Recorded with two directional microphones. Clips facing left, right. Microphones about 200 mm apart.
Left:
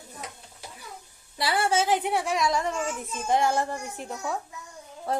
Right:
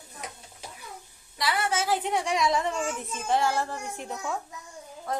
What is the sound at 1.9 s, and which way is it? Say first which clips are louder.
A child's voice: left 1 dB; 10° left (ahead or behind).